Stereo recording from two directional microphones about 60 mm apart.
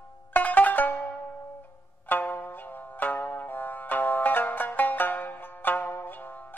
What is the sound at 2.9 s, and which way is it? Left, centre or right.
Music, left.